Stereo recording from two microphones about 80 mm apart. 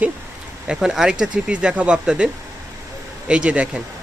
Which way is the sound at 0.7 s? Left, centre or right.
Centre.